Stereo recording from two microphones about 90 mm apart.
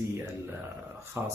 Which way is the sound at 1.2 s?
25° right (ahead or behind).